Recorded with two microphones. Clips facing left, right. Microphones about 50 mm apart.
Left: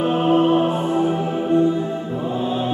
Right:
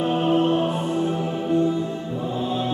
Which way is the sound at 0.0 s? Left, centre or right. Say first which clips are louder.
Left 3 dB; centre.